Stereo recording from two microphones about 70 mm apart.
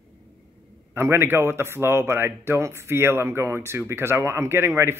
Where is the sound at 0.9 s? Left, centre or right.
Right.